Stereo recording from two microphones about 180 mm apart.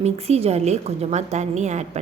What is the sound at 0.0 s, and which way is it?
A woman's voice, 35° right (ahead or behind).